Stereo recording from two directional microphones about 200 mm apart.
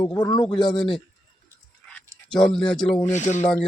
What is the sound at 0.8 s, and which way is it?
Speech, centre (ahead or behind).